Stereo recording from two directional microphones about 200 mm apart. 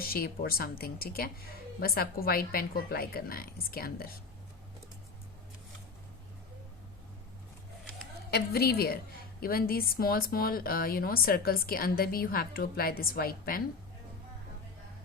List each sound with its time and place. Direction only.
0.0 s speech: 50° left (ahead or behind)
8.3 s speech: 50° left (ahead or behind)